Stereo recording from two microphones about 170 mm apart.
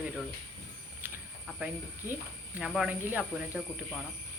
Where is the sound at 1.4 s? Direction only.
5° right (ahead or behind).